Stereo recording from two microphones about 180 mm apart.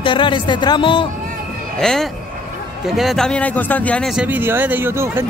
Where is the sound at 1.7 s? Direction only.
5° left (ahead or behind).